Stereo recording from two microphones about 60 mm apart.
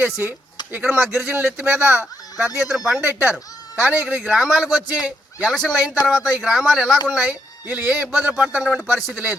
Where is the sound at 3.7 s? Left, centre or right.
Right.